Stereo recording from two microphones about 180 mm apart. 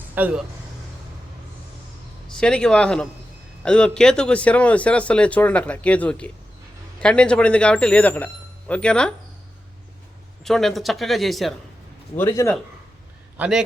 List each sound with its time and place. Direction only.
0.1 s speech: 10° right (ahead or behind)
2.2 s speech: 5° left (ahead or behind)
10.4 s speech: centre (ahead or behind)
12.1 s speech: 10° left (ahead or behind)
13.3 s a man's voice: 10° right (ahead or behind)